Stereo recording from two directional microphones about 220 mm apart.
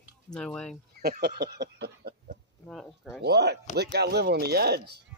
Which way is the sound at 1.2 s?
50° right (ahead or behind).